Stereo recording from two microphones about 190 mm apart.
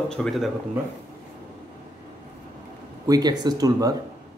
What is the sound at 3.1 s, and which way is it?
Speech, 20° right (ahead or behind).